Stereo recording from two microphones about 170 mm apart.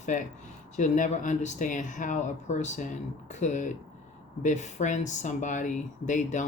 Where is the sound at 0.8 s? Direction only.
45° left (ahead or behind).